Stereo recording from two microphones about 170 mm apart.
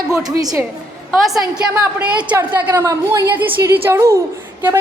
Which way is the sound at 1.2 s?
Centre (ahead or behind).